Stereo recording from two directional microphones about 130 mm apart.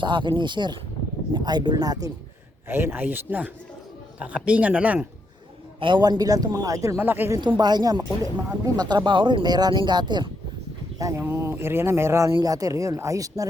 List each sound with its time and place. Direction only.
0.0 s speech: 40° right (ahead or behind)
2.6 s speech: 15° right (ahead or behind)
5.8 s a man's voice: 35° right (ahead or behind); by 7.3 s 15° right (ahead or behind)
7.6 s speech: 35° right (ahead or behind)
10.9 s a man's voice: 25° right (ahead or behind)